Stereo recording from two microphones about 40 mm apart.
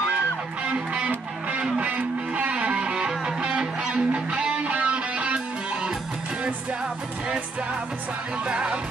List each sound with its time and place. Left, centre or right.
0.7 s music: right
1.8 s music: right
8.5 s music: right